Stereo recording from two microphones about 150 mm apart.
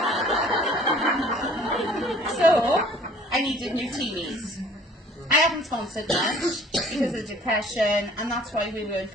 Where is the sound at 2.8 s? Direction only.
Centre (ahead or behind).